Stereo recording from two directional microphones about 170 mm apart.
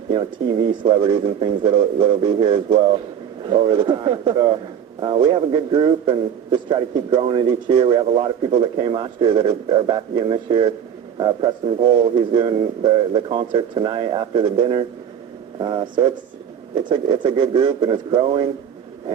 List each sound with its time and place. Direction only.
0.1 s a man's voice: 25° right (ahead or behind)